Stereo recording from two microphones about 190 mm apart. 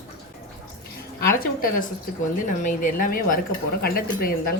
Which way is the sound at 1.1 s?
50° left (ahead or behind).